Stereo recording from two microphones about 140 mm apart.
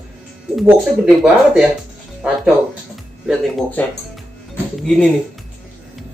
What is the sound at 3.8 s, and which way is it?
Speech, 15° left (ahead or behind).